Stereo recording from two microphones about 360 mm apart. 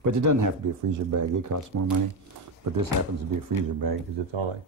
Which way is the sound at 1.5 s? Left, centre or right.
Right.